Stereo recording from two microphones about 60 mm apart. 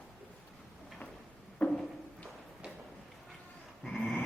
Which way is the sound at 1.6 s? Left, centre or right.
Left.